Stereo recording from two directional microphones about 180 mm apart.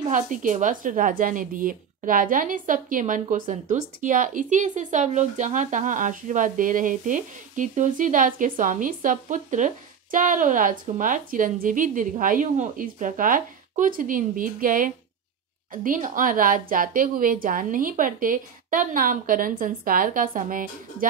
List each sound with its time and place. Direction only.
0.1 s speech: 45° right (ahead or behind)